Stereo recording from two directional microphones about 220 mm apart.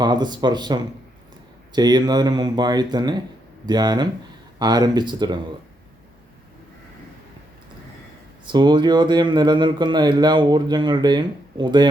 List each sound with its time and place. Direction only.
0.0 s speech: 20° right (ahead or behind)
8.5 s speech: 20° right (ahead or behind)